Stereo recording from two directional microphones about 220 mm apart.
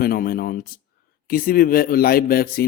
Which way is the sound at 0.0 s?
40° left (ahead or behind).